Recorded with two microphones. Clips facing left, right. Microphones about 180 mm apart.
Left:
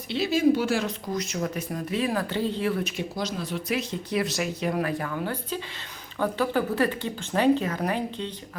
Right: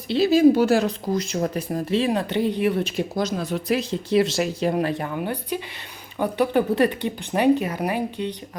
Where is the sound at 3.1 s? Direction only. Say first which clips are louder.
Right 5 dB; 50° right (ahead or behind).